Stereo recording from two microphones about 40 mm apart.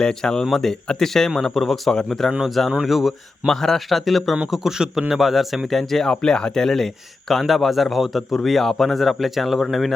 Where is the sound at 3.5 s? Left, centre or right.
Centre.